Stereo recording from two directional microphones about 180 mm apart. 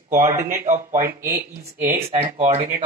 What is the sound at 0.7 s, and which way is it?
Speech, 45° right (ahead or behind).